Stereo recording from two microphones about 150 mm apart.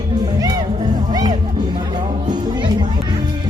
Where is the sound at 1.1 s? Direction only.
30° right (ahead or behind).